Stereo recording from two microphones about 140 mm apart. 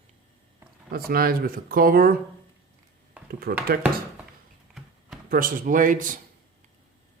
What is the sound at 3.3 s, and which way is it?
Speech, 90° right.